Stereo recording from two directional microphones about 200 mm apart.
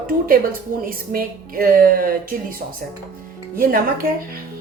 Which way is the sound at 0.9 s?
45° right (ahead or behind).